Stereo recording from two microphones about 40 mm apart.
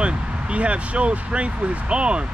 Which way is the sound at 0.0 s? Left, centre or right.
Right.